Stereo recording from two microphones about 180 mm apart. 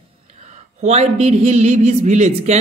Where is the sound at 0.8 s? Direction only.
40° right (ahead or behind).